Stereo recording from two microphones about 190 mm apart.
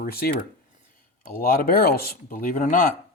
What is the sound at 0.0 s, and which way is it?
Speech, 55° left (ahead or behind).